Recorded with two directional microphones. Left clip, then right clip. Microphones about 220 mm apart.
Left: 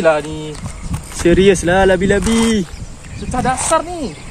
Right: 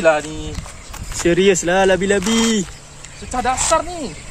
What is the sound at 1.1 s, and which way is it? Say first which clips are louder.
Speech: left 3 dB; 5° right (ahead or behind).